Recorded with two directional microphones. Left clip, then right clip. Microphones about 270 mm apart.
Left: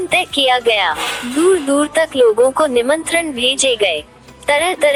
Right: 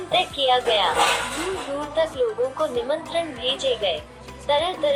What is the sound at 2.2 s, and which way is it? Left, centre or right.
Music, left.